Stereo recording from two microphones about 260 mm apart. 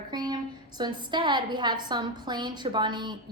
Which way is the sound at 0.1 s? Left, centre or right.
Centre.